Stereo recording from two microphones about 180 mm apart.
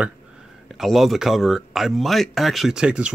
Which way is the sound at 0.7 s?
Centre (ahead or behind).